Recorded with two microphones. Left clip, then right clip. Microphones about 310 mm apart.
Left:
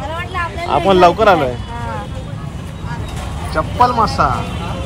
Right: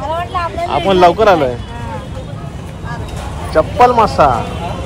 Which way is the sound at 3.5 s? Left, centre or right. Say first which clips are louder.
Right 4 dB; centre.